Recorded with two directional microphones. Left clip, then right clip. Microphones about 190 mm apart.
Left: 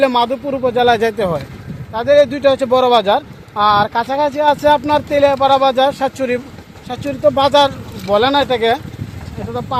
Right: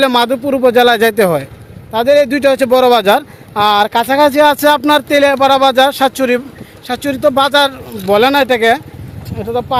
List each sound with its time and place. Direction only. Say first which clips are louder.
0.0 s speech: right 3 dB; 55° right (ahead or behind)
1.9 s speech: right 2 dB; 65° right (ahead or behind)